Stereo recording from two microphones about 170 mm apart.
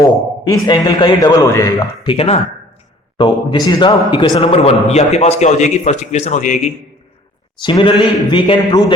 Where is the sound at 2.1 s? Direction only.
35° left (ahead or behind).